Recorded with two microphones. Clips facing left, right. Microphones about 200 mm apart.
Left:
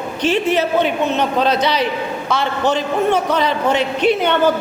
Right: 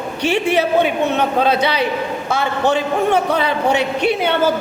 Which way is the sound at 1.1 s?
55° right (ahead or behind).